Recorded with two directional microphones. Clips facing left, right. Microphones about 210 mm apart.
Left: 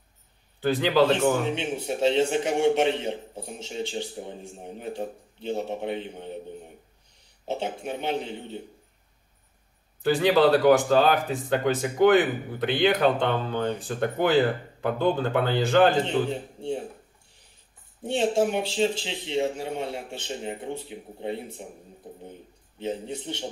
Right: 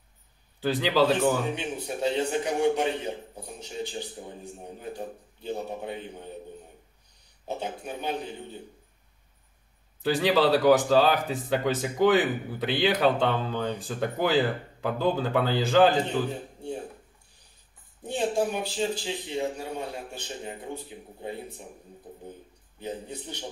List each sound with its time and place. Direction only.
0.6 s a man's voice: centre (ahead or behind)
1.5 s a man's voice: 25° left (ahead or behind)
7.4 s a man's voice: 25° left (ahead or behind)
10.0 s speech: centre (ahead or behind)
18.0 s a man's voice: 25° left (ahead or behind)
22.8 s a man's voice: 25° left (ahead or behind)